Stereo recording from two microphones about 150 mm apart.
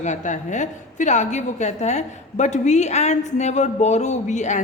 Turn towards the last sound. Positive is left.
turn(degrees=55)  # may be behind; listen again after turning